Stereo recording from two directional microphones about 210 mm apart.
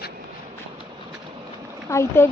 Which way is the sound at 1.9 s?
10° left (ahead or behind).